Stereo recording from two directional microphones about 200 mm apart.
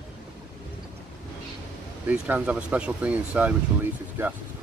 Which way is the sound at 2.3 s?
5° right (ahead or behind).